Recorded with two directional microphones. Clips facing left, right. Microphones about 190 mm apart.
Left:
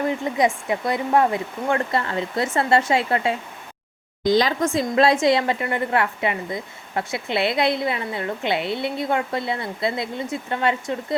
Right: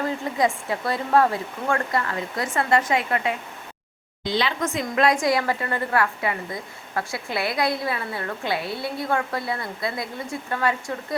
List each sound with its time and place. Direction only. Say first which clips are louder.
0.0 s speech: left 2 dB; 20° left (ahead or behind)
4.2 s speech: left 6 dB; 40° left (ahead or behind); by 10.9 s 25° left (ahead or behind)